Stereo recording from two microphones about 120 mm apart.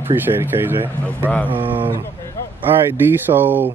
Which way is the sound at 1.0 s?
15° left (ahead or behind).